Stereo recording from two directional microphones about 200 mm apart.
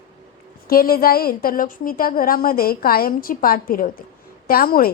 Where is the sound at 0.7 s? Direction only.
50° left (ahead or behind).